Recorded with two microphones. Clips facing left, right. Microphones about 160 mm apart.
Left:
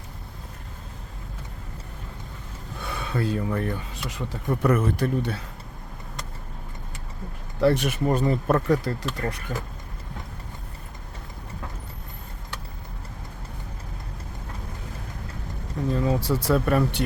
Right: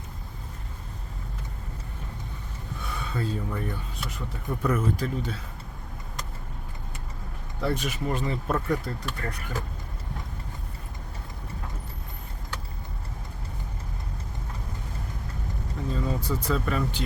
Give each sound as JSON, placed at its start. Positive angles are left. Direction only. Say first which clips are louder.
{"t": 2.9, "sound": "speech", "louder": "left 5 dB", "side_deg": 75}
{"t": 7.6, "sound": "speech", "louder": "left 7 dB", "side_deg": 70}
{"t": 8.1, "sound": "speech", "louder": "left 7 dB", "side_deg": 40}
{"t": 8.4, "sound": "speech", "louder": "left 4 dB", "side_deg": 65}
{"t": 15.9, "sound": "speech", "louder": "left 6 dB", "side_deg": 75}